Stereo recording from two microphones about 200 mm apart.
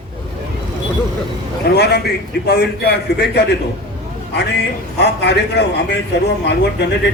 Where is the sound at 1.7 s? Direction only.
55° left (ahead or behind).